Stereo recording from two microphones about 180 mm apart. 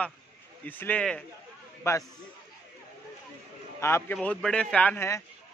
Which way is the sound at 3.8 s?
15° left (ahead or behind).